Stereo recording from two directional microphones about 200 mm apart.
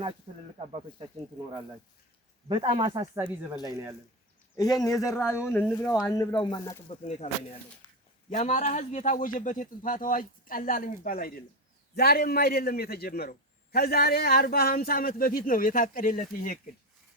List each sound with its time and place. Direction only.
2.5 s speech: 25° right (ahead or behind)
3.2 s speech: 10° right (ahead or behind)
4.5 s speech: 20° left (ahead or behind)
6.8 s a man's voice: 30° left (ahead or behind)